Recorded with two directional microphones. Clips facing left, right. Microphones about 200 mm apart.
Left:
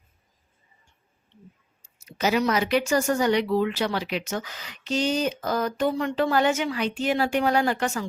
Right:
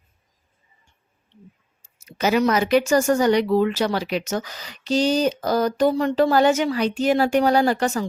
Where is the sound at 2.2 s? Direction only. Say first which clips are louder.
Right 4 dB; 55° right (ahead or behind).